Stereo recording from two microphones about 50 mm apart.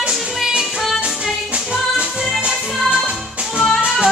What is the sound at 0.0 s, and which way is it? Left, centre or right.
Music, centre.